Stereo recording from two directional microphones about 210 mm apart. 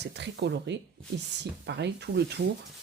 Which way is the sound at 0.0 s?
55° right (ahead or behind).